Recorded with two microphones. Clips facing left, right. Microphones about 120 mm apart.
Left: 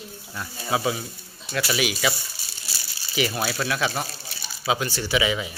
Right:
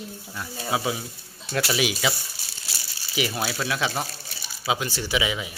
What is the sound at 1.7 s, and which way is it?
Speech, 25° right (ahead or behind).